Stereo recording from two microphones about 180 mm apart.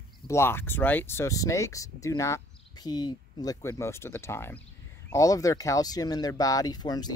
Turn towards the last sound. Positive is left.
turn(degrees=20)  # may be behind; listen again after turning